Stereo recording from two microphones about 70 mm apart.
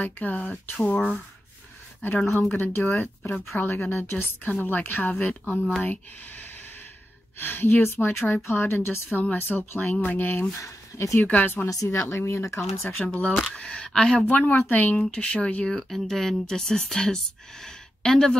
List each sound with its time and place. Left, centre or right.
0.0 s speech: left
2.5 s speech: left
10.6 s speech: left
11.2 s speech: left
11.7 s speech: left
12.1 s speech: left
13.0 s speech: centre
15.0 s speech: centre